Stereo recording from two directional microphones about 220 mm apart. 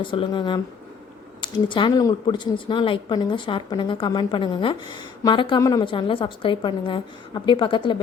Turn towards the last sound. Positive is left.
turn(degrees=20)  # may be behind; listen again after turning